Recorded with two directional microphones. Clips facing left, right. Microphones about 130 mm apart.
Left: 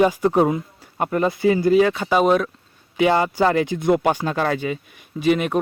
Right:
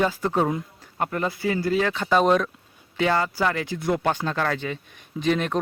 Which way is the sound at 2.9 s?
15° left (ahead or behind).